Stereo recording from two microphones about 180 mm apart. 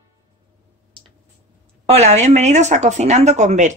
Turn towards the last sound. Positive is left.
turn(degrees=-40)  # may be behind; listen again after turning